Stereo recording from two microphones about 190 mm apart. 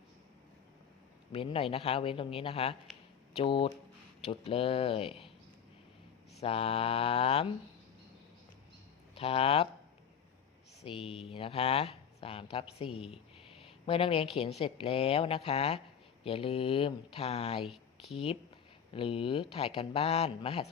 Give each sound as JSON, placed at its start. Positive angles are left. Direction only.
{"t": 1.3, "sound": "speech", "side_deg": 30}
{"t": 6.3, "sound": "speech", "side_deg": 30}
{"t": 9.1, "sound": "speech", "side_deg": 30}
{"t": 10.8, "sound": "speech", "side_deg": 30}
{"t": 17.6, "sound": "a sound", "side_deg": 0}
{"t": 18.1, "sound": "speech", "side_deg": 30}